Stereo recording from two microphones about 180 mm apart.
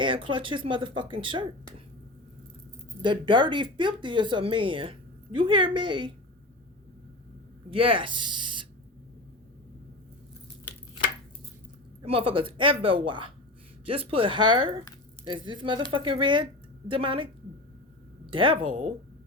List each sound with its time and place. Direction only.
0.0 s speech: 30° right (ahead or behind)
3.0 s speech: 25° right (ahead or behind)
7.7 s speech: 30° right (ahead or behind)
12.0 s speech: 30° right (ahead or behind)
18.3 s a woman's voice: 30° right (ahead or behind)